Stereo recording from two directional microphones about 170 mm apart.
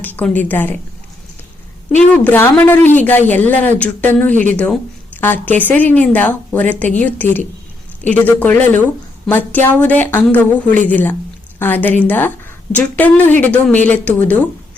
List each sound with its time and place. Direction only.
0.0 s a woman's voice: 10° left (ahead or behind)
2.1 s a woman's voice: 10° left (ahead or behind)